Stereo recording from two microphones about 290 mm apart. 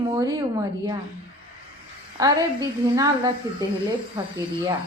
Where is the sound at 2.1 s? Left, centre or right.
Centre.